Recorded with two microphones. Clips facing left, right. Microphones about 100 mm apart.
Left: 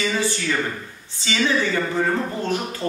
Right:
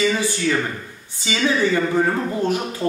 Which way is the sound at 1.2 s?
15° right (ahead or behind).